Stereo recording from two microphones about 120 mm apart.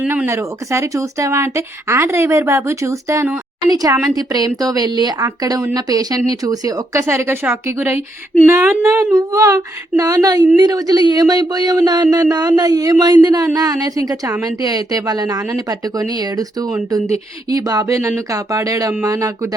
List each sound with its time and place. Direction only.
0.1 s speech: 20° right (ahead or behind)